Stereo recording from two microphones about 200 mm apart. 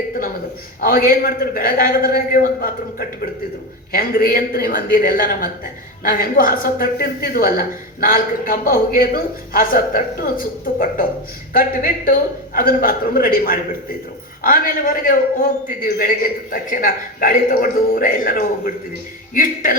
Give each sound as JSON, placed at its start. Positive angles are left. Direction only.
{"t": 0.8, "sound": "a man's voice", "side_deg": 45}
{"t": 11.5, "sound": "a man's voice", "side_deg": 45}